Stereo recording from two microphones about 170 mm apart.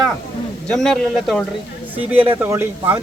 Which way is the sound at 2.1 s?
10° right (ahead or behind).